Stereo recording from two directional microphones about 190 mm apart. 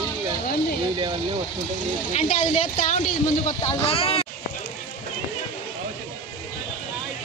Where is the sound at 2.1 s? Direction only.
30° left (ahead or behind).